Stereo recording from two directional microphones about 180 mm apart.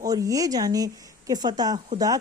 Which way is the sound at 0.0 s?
20° right (ahead or behind).